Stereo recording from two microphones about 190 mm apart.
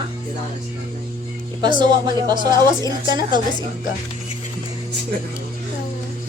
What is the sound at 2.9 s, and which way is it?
Speech, 20° right (ahead or behind).